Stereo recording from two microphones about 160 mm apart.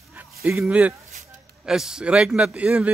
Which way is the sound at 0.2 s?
10° right (ahead or behind).